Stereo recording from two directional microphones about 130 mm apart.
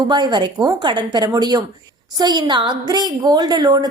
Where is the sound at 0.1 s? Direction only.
35° right (ahead or behind).